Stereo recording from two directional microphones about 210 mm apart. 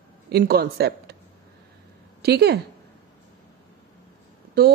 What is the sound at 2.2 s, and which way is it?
Speech, 50° right (ahead or behind).